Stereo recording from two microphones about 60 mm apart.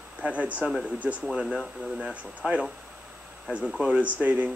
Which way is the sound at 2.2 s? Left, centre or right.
Right.